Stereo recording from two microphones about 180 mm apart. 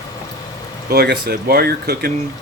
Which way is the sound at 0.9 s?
60° right (ahead or behind).